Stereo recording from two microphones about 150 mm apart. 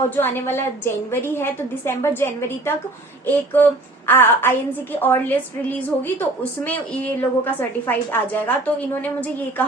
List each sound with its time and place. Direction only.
0.2 s a woman's voice: 15° left (ahead or behind)